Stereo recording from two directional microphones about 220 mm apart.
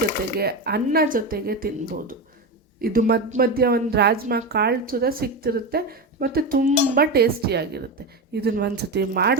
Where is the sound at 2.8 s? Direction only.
45° right (ahead or behind).